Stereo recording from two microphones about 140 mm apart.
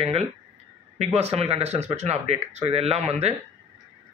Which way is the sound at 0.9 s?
50° right (ahead or behind).